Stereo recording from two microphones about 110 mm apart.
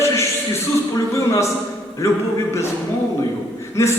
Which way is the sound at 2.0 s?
25° left (ahead or behind).